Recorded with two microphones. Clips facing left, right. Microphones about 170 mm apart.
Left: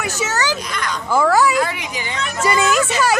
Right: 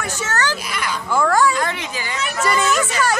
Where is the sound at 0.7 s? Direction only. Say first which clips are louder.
Left 1 dB; 5° right (ahead or behind).